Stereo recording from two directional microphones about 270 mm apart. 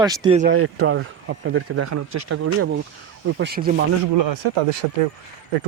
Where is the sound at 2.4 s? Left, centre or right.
Right.